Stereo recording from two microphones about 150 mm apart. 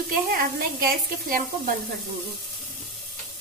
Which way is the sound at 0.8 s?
75° right (ahead or behind).